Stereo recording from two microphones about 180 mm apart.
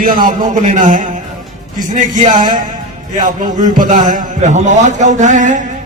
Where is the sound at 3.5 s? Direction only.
45° right (ahead or behind).